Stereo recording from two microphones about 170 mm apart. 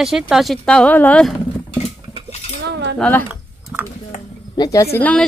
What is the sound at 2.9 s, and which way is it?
Speech, 5° left (ahead or behind).